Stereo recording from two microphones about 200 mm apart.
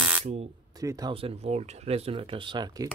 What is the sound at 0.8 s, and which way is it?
Speech, 15° right (ahead or behind).